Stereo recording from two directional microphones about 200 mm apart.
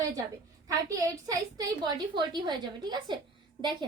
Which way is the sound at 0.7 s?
15° right (ahead or behind).